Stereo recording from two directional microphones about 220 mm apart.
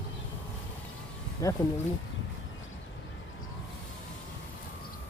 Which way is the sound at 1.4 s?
15° left (ahead or behind).